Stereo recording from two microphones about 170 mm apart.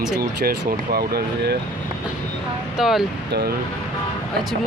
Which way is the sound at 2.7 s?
Centre (ahead or behind).